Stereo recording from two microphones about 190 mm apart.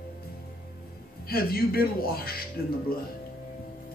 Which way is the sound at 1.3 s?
50° left (ahead or behind).